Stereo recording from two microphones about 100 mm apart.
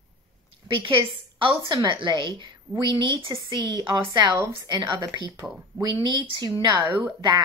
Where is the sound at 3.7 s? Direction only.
45° right (ahead or behind).